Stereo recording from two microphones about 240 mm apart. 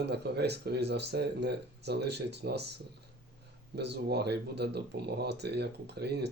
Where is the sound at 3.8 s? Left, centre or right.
Right.